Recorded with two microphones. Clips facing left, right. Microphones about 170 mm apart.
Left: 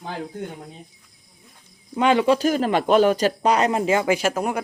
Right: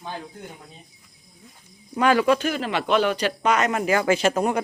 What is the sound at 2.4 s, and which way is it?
Speech, 40° left (ahead or behind).